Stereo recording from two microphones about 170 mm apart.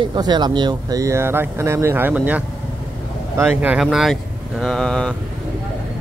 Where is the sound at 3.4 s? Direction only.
5° right (ahead or behind).